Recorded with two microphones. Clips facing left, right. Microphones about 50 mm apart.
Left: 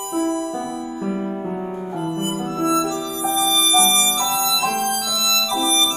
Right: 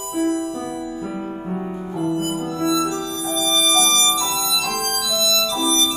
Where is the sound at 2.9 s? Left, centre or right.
Right.